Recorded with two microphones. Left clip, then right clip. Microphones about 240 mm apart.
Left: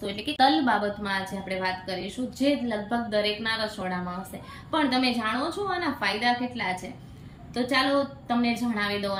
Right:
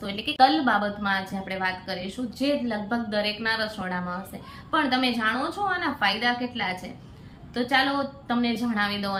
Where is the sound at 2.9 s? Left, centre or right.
Centre.